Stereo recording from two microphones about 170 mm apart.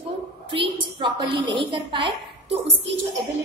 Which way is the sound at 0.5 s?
30° right (ahead or behind).